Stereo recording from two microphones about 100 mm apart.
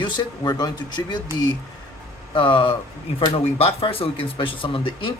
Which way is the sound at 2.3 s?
60° left (ahead or behind).